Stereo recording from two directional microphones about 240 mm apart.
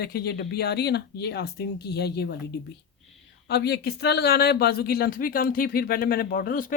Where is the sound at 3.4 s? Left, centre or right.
Left.